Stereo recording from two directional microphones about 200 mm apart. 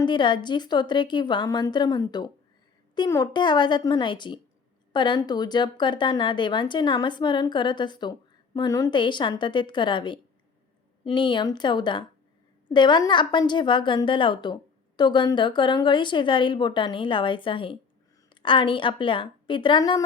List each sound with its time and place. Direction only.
0.0 s a woman's voice: 25° left (ahead or behind)